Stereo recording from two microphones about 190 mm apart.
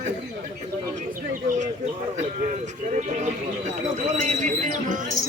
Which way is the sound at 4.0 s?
40° right (ahead or behind).